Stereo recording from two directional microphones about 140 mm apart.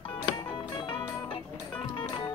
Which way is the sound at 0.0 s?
40° left (ahead or behind).